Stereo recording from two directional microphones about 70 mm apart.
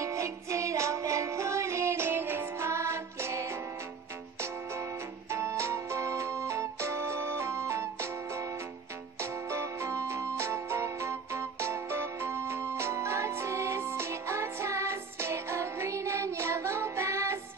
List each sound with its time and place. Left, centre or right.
0.0 s music: right
5.3 s music: right